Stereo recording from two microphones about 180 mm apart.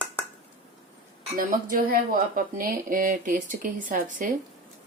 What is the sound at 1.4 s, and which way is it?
Speech, 50° right (ahead or behind).